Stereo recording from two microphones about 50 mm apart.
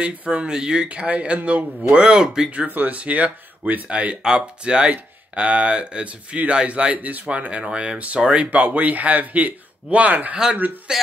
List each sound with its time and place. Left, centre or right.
0.0 s speech: right
2.5 s a man's voice: right
10.3 s a man's voice: right